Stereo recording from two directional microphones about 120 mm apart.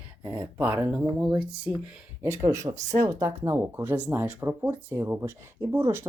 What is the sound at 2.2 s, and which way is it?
Speech, 25° right (ahead or behind).